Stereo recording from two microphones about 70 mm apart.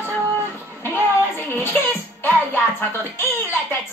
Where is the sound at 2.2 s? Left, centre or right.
Left.